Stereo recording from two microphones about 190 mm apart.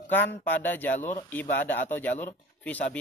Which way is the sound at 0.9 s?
40° left (ahead or behind).